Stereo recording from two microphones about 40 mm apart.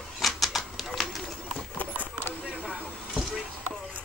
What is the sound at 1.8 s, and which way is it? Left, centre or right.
Clip-clop, left.